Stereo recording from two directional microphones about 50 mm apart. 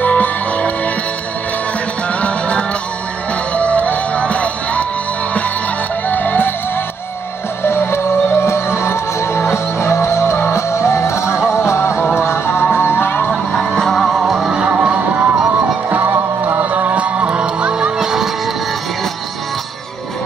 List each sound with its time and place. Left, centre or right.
0.0 s music: left
2.2 s music: left
6.0 s music: left
7.6 s music: left
12.7 s music: left
13.6 s music: centre
14.5 s music: right
15.9 s music: right
16.7 s music: right; by 18.3 s centre